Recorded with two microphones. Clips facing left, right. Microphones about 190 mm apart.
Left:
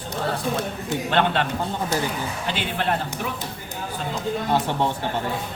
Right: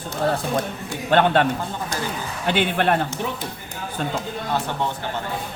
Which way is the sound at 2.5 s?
60° right (ahead or behind).